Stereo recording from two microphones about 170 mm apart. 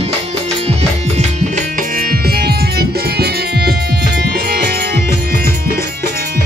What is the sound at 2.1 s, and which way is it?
Music, 70° right (ahead or behind).